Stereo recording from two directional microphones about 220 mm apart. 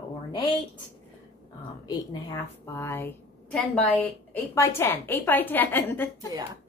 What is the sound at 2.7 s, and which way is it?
Speech, 10° left (ahead or behind).